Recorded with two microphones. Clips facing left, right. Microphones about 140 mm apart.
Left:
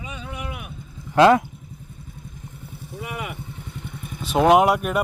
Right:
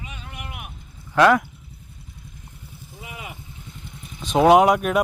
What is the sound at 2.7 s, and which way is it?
Vehicle, 60° left (ahead or behind).